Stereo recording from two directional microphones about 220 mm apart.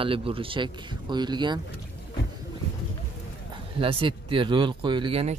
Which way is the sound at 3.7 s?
25° right (ahead or behind).